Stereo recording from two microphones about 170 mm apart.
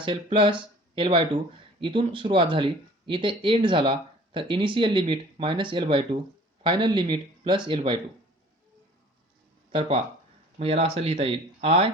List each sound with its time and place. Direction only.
0.0 s speech: 30° right (ahead or behind)
10.6 s speech: 35° right (ahead or behind)